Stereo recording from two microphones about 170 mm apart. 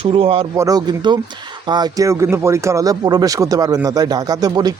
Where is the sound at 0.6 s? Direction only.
20° right (ahead or behind).